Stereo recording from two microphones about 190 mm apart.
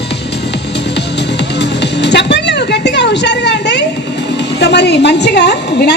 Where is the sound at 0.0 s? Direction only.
65° left (ahead or behind).